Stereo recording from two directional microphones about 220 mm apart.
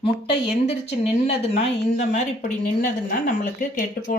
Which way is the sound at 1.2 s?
30° left (ahead or behind).